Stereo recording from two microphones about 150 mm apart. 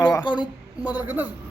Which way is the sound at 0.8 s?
10° right (ahead or behind).